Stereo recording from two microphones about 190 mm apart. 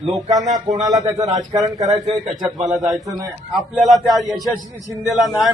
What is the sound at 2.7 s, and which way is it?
Speech, centre (ahead or behind).